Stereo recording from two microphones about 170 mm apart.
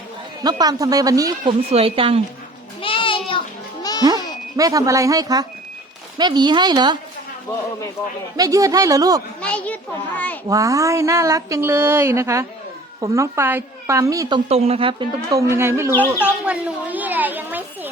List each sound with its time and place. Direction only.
0.4 s a woman's voice: 20° right (ahead or behind)
1.7 s a woman's voice: 35° right (ahead or behind)
2.8 s a sound: 30° left (ahead or behind)
4.5 s a woman's voice: 20° right (ahead or behind)
8.4 s a woman's voice: 20° right (ahead or behind)
9.4 s a child's voice: 5° left (ahead or behind)
10.5 s a woman's voice: 20° right (ahead or behind)
15.3 s speech: 15° right (ahead or behind)